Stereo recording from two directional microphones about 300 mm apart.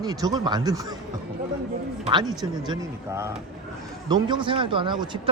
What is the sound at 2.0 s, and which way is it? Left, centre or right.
A man's voice, centre.